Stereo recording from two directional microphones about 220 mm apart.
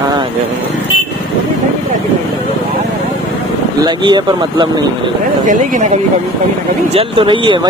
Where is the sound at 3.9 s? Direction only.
20° right (ahead or behind).